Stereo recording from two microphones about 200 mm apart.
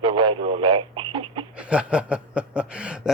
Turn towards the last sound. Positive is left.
turn(degrees=-5)  # may be behind; listen again after turning